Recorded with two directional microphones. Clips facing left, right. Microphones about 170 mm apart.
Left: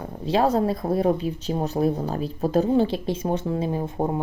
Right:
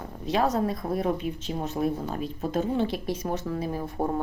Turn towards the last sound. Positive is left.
turn(degrees=25)  # may be behind; listen again after turning